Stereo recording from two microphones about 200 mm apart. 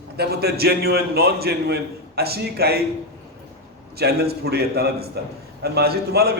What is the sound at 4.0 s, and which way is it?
A man's voice, 50° right (ahead or behind).